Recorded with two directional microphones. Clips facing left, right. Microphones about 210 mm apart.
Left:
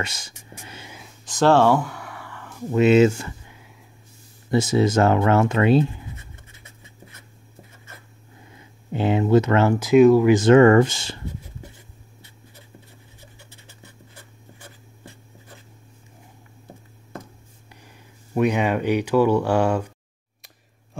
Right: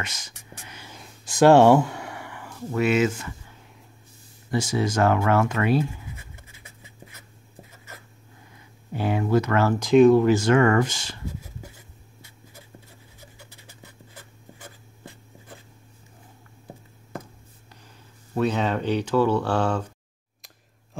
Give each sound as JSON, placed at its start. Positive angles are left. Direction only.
{"t": 0.0, "sound": "speech", "side_deg": 30}
{"t": 0.8, "sound": "a sound", "side_deg": 5}
{"t": 1.2, "sound": "a sound", "side_deg": -10}
{"t": 2.7, "sound": "speech", "side_deg": 25}
{"t": 4.5, "sound": "writing", "side_deg": 25}
{"t": 8.9, "sound": "speech", "side_deg": 25}
{"t": 9.8, "sound": "speech", "side_deg": 5}
{"t": 10.3, "sound": "speech", "side_deg": 25}
{"t": 18.3, "sound": "speech", "side_deg": 15}